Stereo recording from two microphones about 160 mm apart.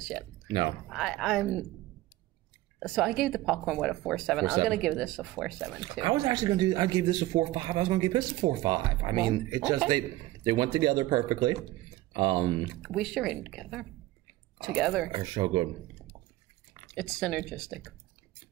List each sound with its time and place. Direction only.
0.8 s speech: centre (ahead or behind)
2.8 s speech: centre (ahead or behind)
5.8 s speech: 30° right (ahead or behind)
12.8 s speech: centre (ahead or behind)
15.0 s speech: 30° right (ahead or behind)
16.9 s speech: 5° left (ahead or behind)